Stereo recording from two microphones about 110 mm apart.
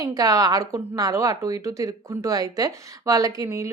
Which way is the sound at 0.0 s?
35° right (ahead or behind).